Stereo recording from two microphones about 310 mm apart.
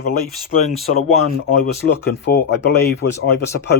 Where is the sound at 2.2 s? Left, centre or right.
Left.